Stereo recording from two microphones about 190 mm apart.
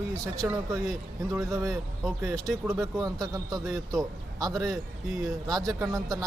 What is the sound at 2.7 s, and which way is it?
Speech, 15° right (ahead or behind).